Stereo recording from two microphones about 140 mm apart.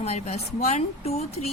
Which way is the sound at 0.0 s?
50° left (ahead or behind).